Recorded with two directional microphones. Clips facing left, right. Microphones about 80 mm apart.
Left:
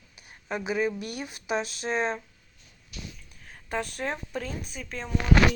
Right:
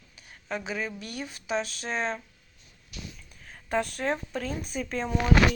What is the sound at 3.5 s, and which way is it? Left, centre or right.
Speech, centre.